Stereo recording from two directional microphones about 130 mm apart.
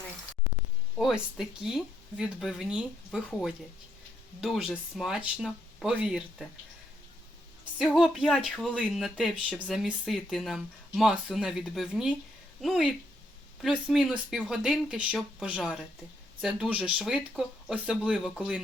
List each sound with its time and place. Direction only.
0.9 s speech: centre (ahead or behind)
4.4 s speech: 5° right (ahead or behind)
7.8 s speech: 5° right (ahead or behind)